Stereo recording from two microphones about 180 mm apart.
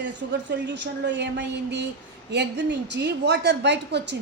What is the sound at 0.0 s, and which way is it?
A woman's voice, 75° right (ahead or behind).